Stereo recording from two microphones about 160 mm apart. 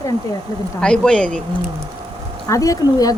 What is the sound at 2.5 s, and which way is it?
Speech, 20° left (ahead or behind).